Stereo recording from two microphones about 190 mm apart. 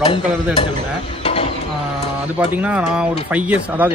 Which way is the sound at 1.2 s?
35° left (ahead or behind).